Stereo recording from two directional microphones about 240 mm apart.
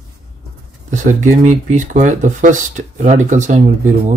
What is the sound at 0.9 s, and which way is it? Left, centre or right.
Speech, right.